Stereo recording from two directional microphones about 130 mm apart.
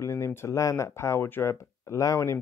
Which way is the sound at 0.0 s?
20° left (ahead or behind).